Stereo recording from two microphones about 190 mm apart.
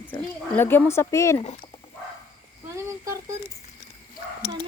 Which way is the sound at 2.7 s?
15° right (ahead or behind).